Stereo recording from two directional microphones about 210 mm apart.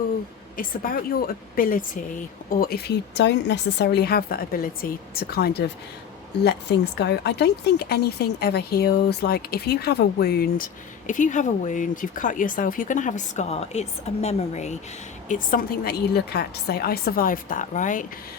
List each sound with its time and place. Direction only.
0.5 s speech: 40° left (ahead or behind)